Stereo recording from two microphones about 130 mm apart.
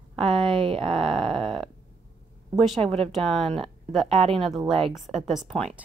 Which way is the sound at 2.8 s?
50° right (ahead or behind).